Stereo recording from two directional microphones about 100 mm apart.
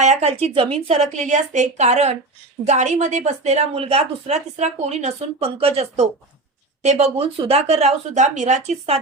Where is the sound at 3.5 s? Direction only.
90° right.